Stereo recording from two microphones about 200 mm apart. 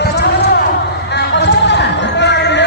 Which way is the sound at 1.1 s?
60° left (ahead or behind).